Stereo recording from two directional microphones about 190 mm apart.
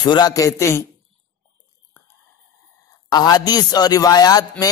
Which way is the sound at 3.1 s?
20° left (ahead or behind).